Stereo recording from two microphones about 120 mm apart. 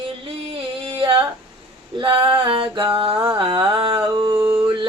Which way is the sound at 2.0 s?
45° right (ahead or behind).